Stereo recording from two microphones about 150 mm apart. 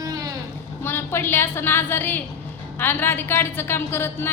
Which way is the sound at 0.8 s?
15° left (ahead or behind).